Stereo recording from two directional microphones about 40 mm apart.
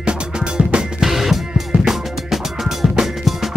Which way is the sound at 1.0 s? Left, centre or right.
Centre.